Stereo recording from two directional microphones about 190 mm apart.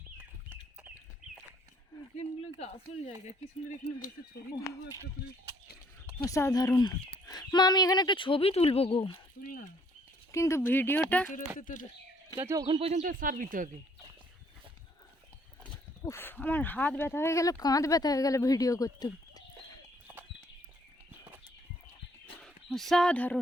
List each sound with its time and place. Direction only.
6.2 s speech: 15° left (ahead or behind)
9.4 s speech: 45° left (ahead or behind)
10.3 s speech: 15° left (ahead or behind)
11.3 s speech: 45° left (ahead or behind)
12.4 s a man's voice: 15° right (ahead or behind)
12.6 s speech: 30° right (ahead or behind); by 13.7 s 45° right (ahead or behind)
16.0 s speech: 10° left (ahead or behind)
22.4 s speech: centre (ahead or behind)